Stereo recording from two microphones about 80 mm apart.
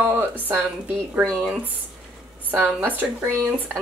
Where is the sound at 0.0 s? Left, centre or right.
Right.